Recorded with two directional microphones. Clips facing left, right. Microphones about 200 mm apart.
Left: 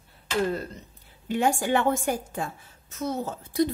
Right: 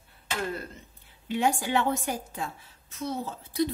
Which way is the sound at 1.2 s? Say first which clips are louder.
Left 2 dB; 50° left (ahead or behind).